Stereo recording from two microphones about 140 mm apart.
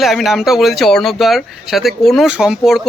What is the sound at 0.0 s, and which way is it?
Speech, centre (ahead or behind).